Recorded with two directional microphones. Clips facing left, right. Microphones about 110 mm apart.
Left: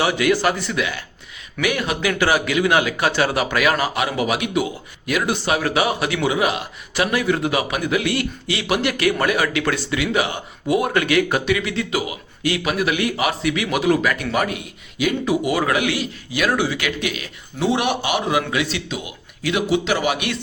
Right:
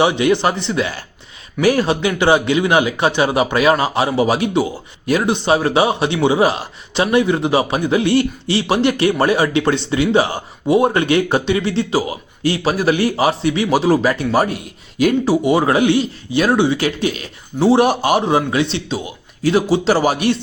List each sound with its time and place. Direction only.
0.0 s a man's voice: 25° right (ahead or behind)